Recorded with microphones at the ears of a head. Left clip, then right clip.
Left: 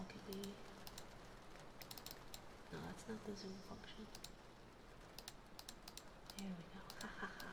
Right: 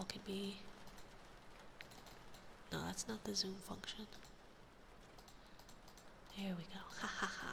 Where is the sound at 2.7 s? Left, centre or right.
Right.